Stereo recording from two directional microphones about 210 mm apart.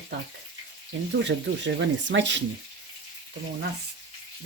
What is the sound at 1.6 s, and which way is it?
Speech, 60° right (ahead or behind).